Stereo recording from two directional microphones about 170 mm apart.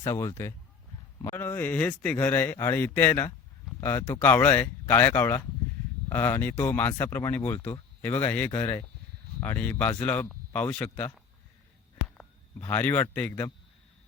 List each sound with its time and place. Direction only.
0.0 s speech: 20° left (ahead or behind)
12.0 s a sound: 5° left (ahead or behind)
12.6 s speech: 10° left (ahead or behind)